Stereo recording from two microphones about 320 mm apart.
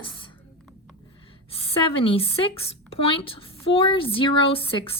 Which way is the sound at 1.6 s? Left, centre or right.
Centre.